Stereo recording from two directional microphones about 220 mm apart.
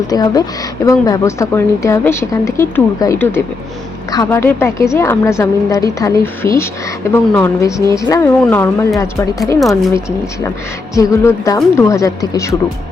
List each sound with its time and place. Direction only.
0.1 s speech: 15° left (ahead or behind)
9.6 s speech: centre (ahead or behind)
10.9 s speech: 15° left (ahead or behind)